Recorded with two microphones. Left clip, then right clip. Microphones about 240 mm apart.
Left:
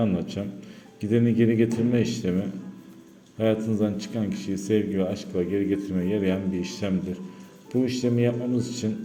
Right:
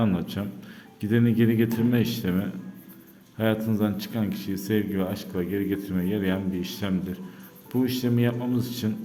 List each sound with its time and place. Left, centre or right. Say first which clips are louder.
0.0 s speech: left 1 dB; centre